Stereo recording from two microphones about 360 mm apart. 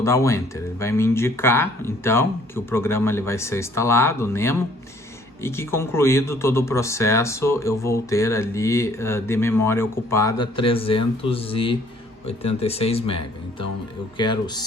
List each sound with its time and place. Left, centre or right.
0.0 s speech: centre
14.2 s speech: centre